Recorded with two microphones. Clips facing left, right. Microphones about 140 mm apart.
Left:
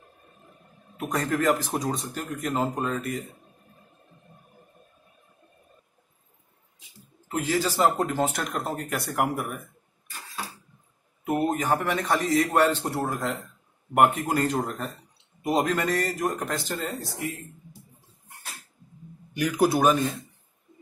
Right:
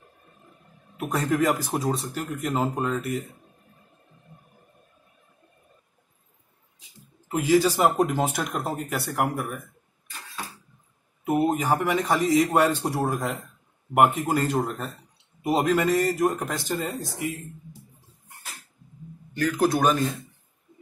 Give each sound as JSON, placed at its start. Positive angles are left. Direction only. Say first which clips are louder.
{"t": 0.9, "sound": "speech", "louder": "right 2 dB", "side_deg": -5}
{"t": 7.2, "sound": "speech", "louder": "right 6 dB", "side_deg": -15}
{"t": 11.2, "sound": "speech", "louder": "right 2 dB", "side_deg": -10}
{"t": 19.3, "sound": "speech", "louder": "even", "side_deg": 15}